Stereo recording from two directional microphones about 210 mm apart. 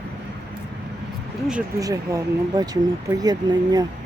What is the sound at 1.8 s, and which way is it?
Speech, 15° right (ahead or behind).